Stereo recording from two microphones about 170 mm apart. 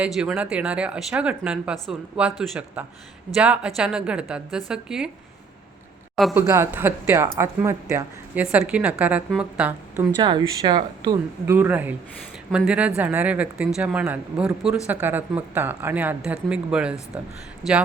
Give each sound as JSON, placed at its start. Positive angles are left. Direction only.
{"t": 0.0, "sound": "a woman's voice", "side_deg": -5}
{"t": 6.3, "sound": "speech", "side_deg": -15}
{"t": 10.2, "sound": "speech", "side_deg": -30}
{"t": 11.5, "sound": "speech", "side_deg": -10}